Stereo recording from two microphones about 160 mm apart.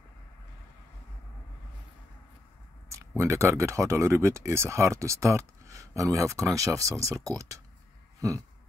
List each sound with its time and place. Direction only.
2.9 s speech: 20° right (ahead or behind)